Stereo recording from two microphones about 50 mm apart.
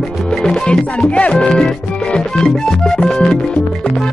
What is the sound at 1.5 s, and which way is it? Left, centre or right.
Music, centre.